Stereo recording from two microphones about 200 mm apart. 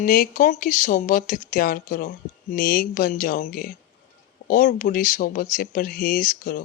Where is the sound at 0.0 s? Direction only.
45° left (ahead or behind).